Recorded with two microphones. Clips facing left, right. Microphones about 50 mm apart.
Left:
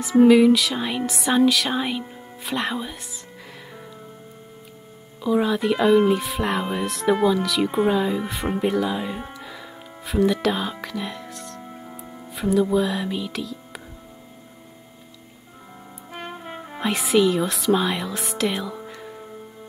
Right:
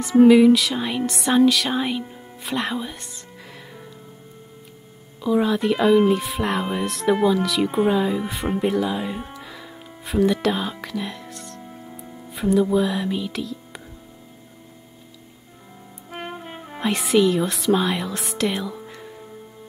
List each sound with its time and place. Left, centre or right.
0.0 s speech: centre
5.2 s speech: centre
11.6 s music: centre
12.3 s speech: centre
16.1 s speech: centre
18.9 s music: centre